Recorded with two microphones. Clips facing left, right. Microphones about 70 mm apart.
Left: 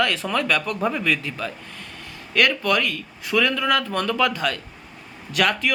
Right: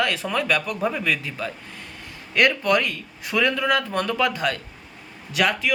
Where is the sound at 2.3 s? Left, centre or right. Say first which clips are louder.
Right 1 dB; right.